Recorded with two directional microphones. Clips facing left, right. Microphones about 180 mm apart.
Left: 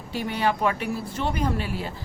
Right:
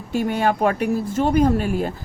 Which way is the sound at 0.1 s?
50° right (ahead or behind).